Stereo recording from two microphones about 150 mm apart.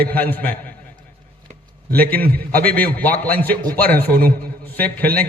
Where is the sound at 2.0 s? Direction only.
80° right.